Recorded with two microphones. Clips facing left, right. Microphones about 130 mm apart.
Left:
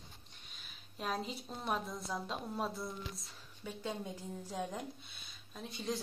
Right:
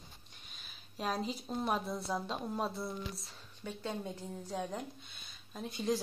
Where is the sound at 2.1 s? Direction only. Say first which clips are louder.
Right 1 dB; centre (ahead or behind).